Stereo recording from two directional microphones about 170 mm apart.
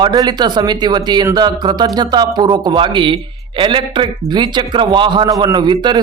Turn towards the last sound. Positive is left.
turn(degrees=-25)  # may be behind; listen again after turning